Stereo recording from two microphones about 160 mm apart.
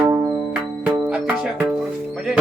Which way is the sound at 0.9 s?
10° right (ahead or behind).